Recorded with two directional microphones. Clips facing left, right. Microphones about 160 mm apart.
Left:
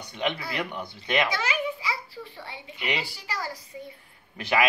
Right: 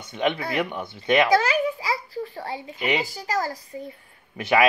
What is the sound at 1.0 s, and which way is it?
A child's voice, 40° right (ahead or behind).